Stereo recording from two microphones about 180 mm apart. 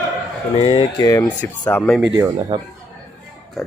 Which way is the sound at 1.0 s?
15° left (ahead or behind).